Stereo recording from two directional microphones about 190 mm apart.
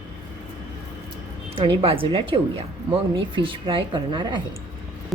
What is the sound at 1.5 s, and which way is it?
A woman's voice, 30° right (ahead or behind).